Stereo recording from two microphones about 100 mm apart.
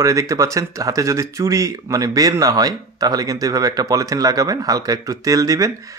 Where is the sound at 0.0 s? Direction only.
35° right (ahead or behind).